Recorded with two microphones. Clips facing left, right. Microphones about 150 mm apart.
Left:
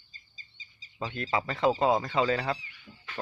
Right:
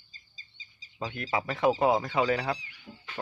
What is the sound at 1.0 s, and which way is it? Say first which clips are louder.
Speech: left 1 dB; 10° right (ahead or behind).